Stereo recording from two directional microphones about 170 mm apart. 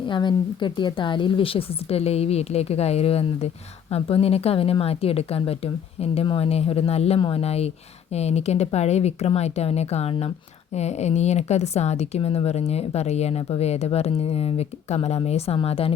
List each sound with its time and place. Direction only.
0.1 s a woman's voice: 25° left (ahead or behind)